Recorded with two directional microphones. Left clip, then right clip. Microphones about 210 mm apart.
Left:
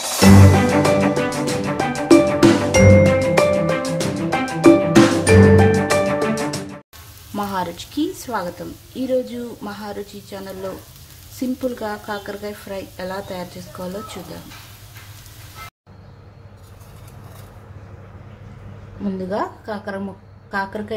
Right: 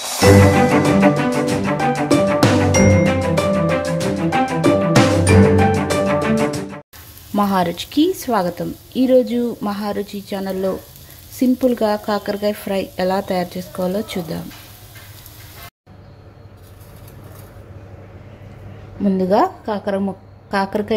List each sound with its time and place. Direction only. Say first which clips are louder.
0.2 s music: right 3 dB; centre (ahead or behind)
7.3 s a woman's voice: right 6 dB; 25° right (ahead or behind)
19.0 s a woman's voice: right 8 dB; 25° right (ahead or behind)